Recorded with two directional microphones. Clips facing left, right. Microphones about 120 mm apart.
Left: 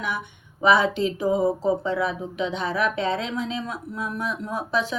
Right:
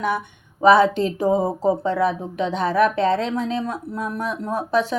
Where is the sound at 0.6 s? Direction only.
40° right (ahead or behind).